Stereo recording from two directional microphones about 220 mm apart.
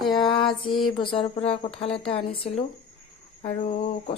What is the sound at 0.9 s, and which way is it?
Speech, 25° left (ahead or behind).